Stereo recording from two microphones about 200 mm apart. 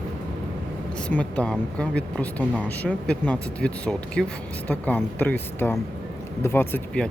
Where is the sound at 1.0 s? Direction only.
5° left (ahead or behind).